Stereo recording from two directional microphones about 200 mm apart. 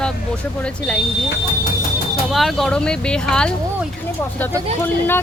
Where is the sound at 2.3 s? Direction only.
Centre (ahead or behind).